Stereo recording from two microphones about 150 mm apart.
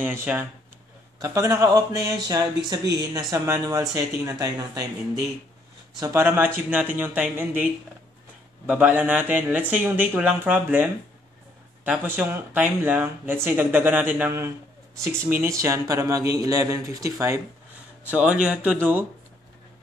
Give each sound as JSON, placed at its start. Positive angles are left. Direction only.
{"t": 0.0, "sound": "speech", "side_deg": -10}
{"t": 5.9, "sound": "speech", "side_deg": -20}
{"t": 8.6, "sound": "speech", "side_deg": -10}
{"t": 18.0, "sound": "speech", "side_deg": -10}